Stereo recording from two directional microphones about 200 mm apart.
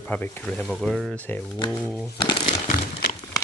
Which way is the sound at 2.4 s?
45° left (ahead or behind).